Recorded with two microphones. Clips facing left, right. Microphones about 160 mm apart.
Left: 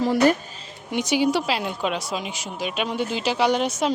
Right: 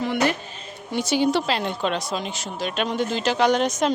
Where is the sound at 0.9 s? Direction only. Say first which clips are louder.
Even; 15° left (ahead or behind).